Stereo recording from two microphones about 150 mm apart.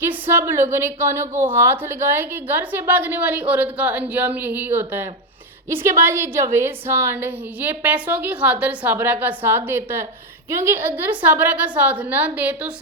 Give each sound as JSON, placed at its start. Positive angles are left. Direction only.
{"t": 0.0, "sound": "a woman's voice", "side_deg": -15}